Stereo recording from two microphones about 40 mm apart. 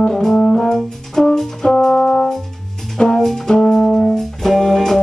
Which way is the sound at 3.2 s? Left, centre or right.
Centre.